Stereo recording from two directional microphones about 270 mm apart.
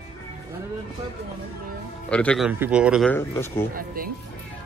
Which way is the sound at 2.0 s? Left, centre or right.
Centre.